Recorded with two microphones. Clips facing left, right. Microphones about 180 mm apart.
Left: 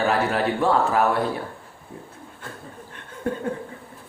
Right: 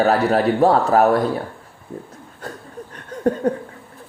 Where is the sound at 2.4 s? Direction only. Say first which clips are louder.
Right 7 dB; 40° right (ahead or behind).